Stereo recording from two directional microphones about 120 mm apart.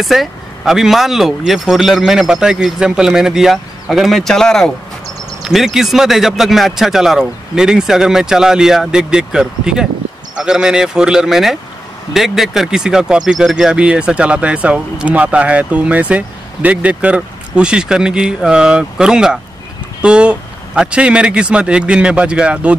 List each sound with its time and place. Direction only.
0.0 s speech: centre (ahead or behind)